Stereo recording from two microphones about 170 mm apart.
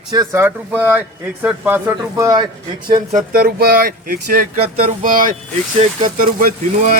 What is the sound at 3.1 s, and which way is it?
Speech, 60° right (ahead or behind).